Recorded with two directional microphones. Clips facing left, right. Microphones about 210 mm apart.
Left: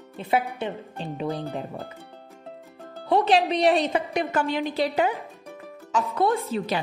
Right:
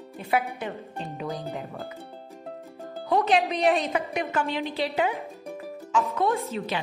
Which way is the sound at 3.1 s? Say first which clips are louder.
Left 2 dB; 30° left (ahead or behind).